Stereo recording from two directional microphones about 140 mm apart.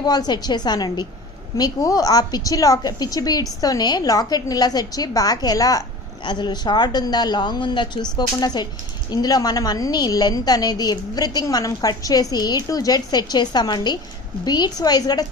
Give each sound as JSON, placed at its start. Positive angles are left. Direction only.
{"t": 0.0, "sound": "a woman's voice", "side_deg": 30}